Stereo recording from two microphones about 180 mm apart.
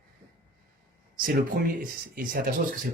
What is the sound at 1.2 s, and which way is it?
Speech, 50° right (ahead or behind).